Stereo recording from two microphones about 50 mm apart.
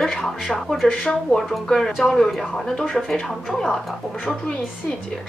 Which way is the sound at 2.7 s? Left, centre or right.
Centre.